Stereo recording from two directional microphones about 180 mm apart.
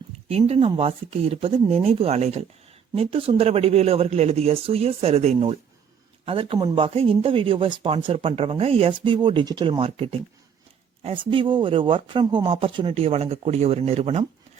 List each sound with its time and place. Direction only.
0.3 s speech: 35° right (ahead or behind)